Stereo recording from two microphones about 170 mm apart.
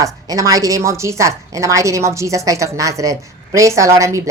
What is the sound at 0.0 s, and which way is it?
A woman's voice, 20° right (ahead or behind).